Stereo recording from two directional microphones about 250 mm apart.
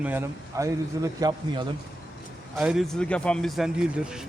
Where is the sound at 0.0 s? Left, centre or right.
Centre.